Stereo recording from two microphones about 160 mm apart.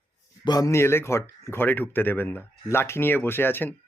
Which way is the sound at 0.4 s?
25° left (ahead or behind).